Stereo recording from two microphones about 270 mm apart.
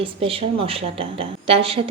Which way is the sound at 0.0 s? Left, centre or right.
Right.